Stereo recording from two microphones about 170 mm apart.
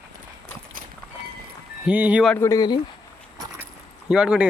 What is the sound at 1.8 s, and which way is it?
Speech, 10° right (ahead or behind).